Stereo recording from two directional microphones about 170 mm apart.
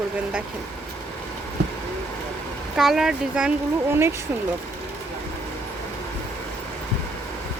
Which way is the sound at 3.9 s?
15° right (ahead or behind).